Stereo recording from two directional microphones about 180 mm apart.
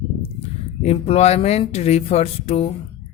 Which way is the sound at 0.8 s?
35° left (ahead or behind).